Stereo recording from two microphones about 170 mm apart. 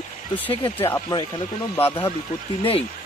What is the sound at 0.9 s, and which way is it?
Speech, 20° left (ahead or behind).